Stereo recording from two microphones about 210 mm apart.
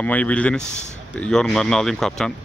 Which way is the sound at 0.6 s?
35° left (ahead or behind).